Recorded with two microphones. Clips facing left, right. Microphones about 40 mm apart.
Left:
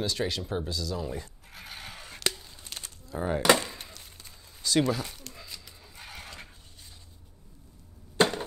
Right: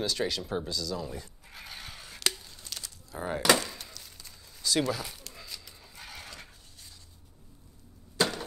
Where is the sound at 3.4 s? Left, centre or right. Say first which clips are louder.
Left 1 dB; centre.